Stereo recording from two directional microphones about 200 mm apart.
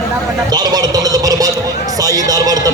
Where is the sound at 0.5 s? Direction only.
20° right (ahead or behind).